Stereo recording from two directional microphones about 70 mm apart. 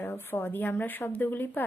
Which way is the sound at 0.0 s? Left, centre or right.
Left.